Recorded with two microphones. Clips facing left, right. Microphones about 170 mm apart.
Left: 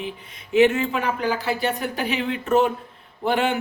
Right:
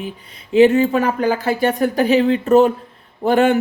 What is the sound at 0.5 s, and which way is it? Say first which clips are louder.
A woman's voice: right 6 dB; 35° right (ahead or behind).